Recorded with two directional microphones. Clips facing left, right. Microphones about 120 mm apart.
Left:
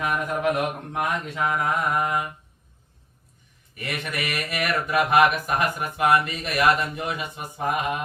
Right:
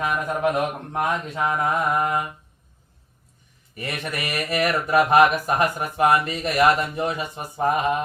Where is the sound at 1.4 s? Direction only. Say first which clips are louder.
Right 2 dB; 25° right (ahead or behind).